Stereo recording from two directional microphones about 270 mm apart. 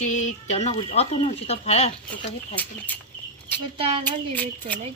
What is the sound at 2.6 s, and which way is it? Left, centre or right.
Speech, centre.